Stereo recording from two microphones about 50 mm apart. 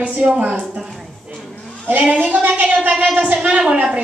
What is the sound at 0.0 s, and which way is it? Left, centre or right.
Speech, right.